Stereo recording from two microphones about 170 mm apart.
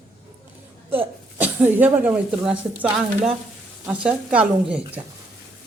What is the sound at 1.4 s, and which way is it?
Speech, 10° right (ahead or behind).